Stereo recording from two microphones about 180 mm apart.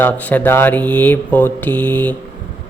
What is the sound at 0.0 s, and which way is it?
Mantra, 10° left (ahead or behind).